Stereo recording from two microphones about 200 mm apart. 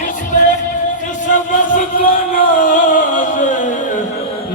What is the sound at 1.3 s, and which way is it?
Music, 40° left (ahead or behind).